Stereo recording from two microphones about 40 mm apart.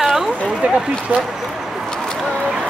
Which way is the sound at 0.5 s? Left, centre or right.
Centre.